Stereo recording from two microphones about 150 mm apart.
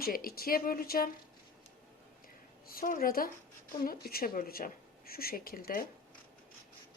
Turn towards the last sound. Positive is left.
turn(degrees=75)  # may be behind; listen again after turning